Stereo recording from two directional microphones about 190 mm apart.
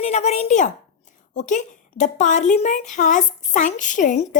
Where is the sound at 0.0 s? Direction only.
35° left (ahead or behind).